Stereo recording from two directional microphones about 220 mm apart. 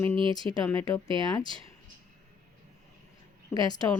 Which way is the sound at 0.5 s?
15° left (ahead or behind).